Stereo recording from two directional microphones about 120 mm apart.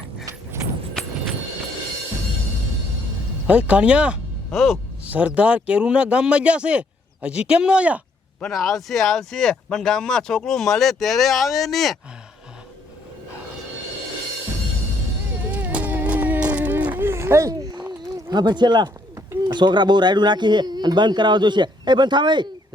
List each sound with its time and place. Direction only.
3.4 s speech: 10° right (ahead or behind)
5.0 s speech: 10° right (ahead or behind)
8.4 s speech: 5° left (ahead or behind)
15.5 s run: 15° right (ahead or behind); by 18.9 s 40° right (ahead or behind)
19.5 s a man's voice: 40° right (ahead or behind)